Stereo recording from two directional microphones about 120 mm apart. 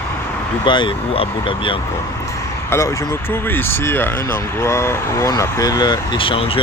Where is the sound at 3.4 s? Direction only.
20° left (ahead or behind).